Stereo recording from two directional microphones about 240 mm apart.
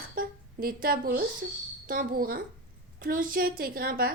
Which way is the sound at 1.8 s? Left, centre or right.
Right.